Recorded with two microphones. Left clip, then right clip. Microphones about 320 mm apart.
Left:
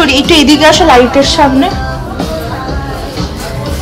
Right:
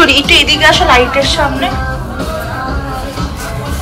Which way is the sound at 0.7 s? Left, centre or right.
Left.